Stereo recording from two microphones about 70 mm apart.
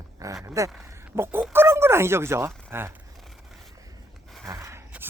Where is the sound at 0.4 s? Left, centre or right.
Right.